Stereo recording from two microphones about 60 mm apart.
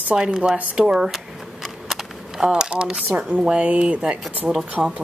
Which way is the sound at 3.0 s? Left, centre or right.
Right.